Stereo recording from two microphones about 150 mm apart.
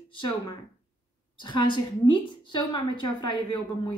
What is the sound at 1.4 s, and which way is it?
Speech, 30° left (ahead or behind).